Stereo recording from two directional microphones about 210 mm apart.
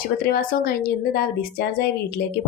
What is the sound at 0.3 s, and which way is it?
A woman's voice, 45° left (ahead or behind).